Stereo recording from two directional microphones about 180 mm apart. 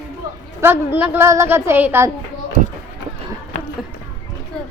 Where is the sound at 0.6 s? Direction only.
15° right (ahead or behind).